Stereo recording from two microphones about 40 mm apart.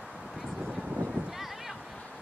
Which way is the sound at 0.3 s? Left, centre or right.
Centre.